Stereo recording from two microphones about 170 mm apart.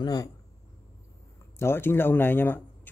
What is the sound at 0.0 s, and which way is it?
Speech, 25° left (ahead or behind).